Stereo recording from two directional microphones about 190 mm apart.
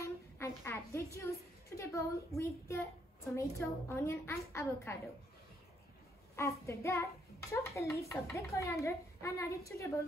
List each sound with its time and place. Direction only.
0.0 s a sound: 15° left (ahead or behind)
1.8 s a child's voice: 15° left (ahead or behind)
6.3 s a child's voice: 15° left (ahead or behind)